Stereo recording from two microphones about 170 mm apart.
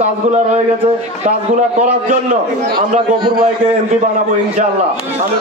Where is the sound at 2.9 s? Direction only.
30° right (ahead or behind).